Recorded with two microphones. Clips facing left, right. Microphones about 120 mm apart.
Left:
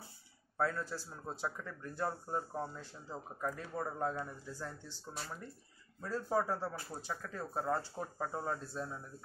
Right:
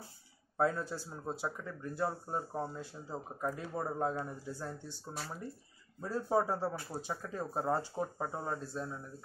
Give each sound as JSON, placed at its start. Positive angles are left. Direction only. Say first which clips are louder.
{"t": 0.6, "sound": "speech", "louder": "right 3 dB", "side_deg": -20}